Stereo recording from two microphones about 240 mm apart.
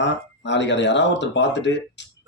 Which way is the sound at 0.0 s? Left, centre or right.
Left.